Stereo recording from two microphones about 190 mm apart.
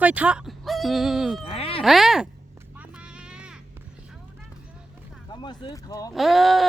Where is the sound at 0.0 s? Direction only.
10° right (ahead or behind).